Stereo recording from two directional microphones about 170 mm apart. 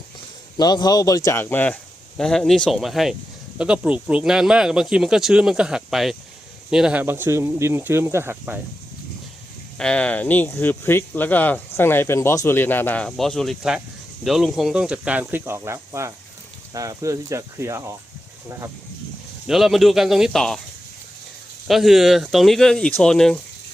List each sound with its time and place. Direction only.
0.5 s speech: 25° left (ahead or behind); by 8.6 s 10° right (ahead or behind)
9.7 s speech: 5° left (ahead or behind); by 17.8 s 15° right (ahead or behind)
19.5 s speech: centre (ahead or behind)
21.7 s speech: centre (ahead or behind)